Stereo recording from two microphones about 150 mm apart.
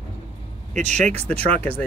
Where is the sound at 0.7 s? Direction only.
50° right (ahead or behind).